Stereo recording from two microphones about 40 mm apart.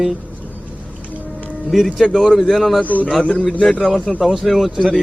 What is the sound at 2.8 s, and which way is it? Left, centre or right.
Speech, left.